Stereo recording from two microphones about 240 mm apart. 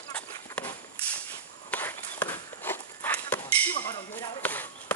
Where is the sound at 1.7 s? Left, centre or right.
Centre.